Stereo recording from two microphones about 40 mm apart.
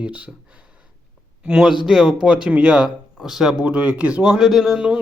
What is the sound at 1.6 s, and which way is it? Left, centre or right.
Speech, centre.